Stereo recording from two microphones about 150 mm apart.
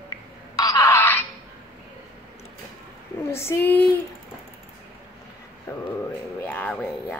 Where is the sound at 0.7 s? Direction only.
20° left (ahead or behind).